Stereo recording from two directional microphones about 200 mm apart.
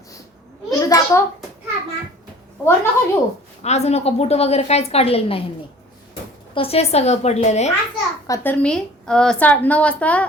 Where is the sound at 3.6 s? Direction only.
35° left (ahead or behind).